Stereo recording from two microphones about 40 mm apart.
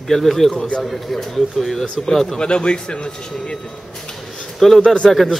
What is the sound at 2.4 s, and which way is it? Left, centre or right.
A man's voice, left.